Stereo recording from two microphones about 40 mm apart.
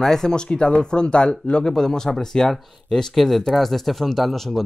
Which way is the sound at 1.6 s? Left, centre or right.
Centre.